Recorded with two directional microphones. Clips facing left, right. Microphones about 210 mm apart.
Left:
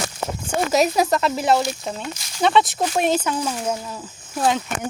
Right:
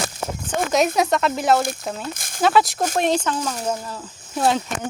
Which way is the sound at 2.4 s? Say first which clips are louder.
Even; centre (ahead or behind).